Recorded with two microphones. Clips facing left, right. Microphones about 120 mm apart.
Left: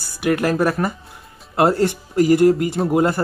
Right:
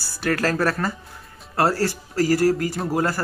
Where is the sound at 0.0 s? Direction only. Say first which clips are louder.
Left 4 dB; 15° left (ahead or behind).